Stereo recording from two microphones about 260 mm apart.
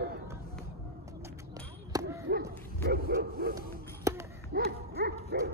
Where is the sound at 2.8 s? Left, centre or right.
Right.